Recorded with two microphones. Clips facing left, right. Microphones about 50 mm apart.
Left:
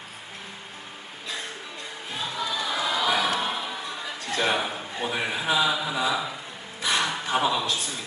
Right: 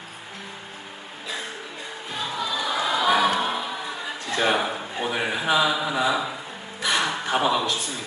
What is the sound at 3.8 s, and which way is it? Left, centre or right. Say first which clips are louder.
Speech: right 2 dB; centre.